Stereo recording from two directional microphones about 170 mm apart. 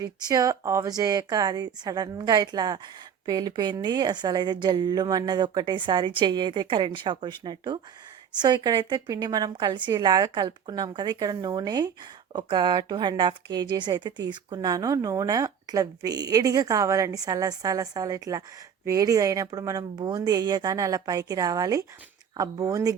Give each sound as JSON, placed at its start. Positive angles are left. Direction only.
{"t": 0.0, "sound": "a woman's voice", "side_deg": -20}